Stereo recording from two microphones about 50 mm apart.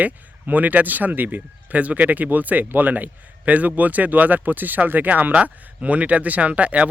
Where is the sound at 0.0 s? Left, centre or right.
Right.